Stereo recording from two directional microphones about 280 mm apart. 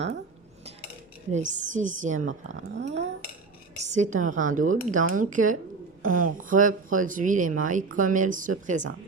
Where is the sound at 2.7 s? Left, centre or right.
Right.